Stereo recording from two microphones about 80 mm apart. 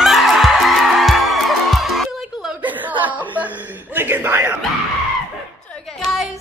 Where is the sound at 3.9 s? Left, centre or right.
Right.